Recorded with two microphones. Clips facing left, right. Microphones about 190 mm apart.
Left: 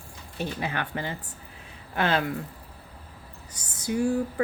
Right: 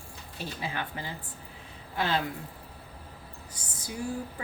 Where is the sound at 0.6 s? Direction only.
70° left (ahead or behind).